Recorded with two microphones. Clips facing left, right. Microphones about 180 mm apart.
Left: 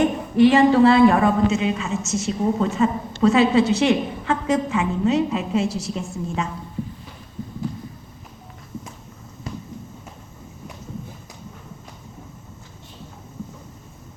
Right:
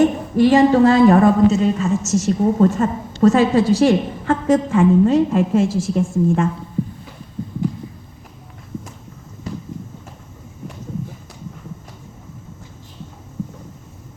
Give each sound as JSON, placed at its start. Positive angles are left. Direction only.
{"t": 0.0, "sound": "a man's voice", "side_deg": -40}